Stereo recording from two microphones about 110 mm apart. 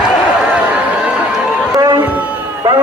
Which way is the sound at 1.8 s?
40° right (ahead or behind).